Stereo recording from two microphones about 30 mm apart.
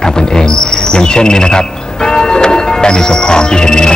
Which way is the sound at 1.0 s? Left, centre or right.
Left.